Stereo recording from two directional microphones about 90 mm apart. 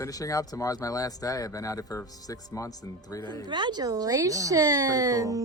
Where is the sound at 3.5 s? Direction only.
60° right (ahead or behind).